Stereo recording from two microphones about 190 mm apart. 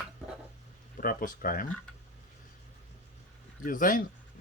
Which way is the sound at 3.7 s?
45° left (ahead or behind).